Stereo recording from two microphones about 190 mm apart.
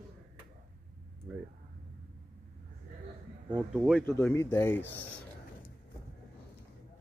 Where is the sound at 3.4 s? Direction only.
10° right (ahead or behind).